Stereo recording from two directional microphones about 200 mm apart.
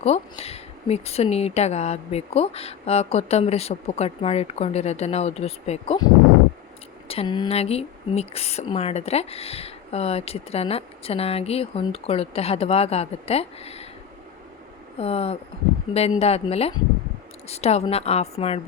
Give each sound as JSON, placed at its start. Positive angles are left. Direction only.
{"t": 0.0, "sound": "speech", "side_deg": 30}
{"t": 7.1, "sound": "speech", "side_deg": 25}
{"t": 14.9, "sound": "speech", "side_deg": 30}